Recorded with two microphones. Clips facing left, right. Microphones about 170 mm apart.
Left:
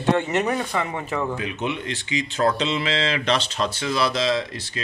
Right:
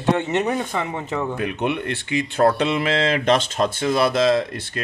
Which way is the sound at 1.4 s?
60° right (ahead or behind).